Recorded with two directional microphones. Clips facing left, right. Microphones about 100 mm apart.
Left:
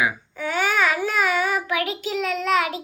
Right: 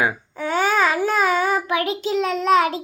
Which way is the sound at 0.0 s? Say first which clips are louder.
Right 2 dB; 35° right (ahead or behind).